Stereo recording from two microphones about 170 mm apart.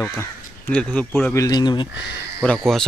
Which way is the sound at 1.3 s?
20° left (ahead or behind).